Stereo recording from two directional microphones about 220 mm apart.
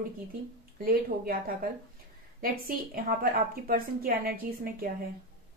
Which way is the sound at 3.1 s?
40° right (ahead or behind).